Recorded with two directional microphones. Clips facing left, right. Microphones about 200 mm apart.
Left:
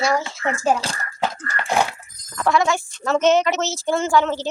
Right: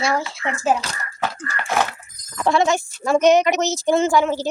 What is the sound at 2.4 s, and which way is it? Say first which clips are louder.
Speech: right 1 dB; 25° right (ahead or behind).